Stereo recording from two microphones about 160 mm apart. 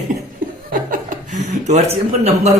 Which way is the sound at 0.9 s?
50° right (ahead or behind).